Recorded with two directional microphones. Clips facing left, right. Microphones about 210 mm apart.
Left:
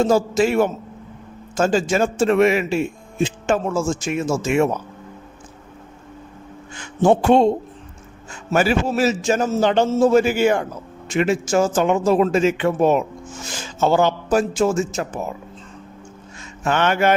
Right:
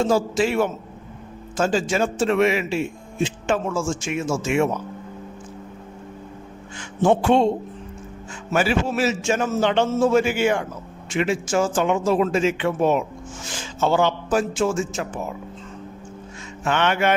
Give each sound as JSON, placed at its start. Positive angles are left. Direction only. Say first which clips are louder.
{"t": 0.0, "sound": "a man's voice", "louder": "left 3 dB", "side_deg": 45}
{"t": 7.0, "sound": "a man's voice", "louder": "left 3 dB", "side_deg": 40}
{"t": 8.5, "sound": "a man's voice", "louder": "left 3 dB", "side_deg": 40}
{"t": 16.6, "sound": "a man's voice", "louder": "left 3 dB", "side_deg": 40}